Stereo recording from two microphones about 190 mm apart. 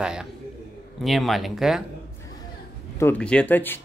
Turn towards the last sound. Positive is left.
turn(degrees=10)  # may be behind; listen again after turning